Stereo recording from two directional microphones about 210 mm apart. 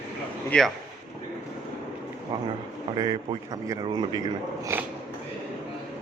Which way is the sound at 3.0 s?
20° right (ahead or behind).